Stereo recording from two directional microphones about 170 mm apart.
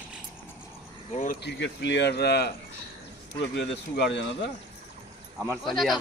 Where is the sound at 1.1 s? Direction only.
50° left (ahead or behind).